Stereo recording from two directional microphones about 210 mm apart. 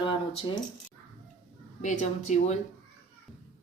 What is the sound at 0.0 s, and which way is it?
Speech, 20° left (ahead or behind).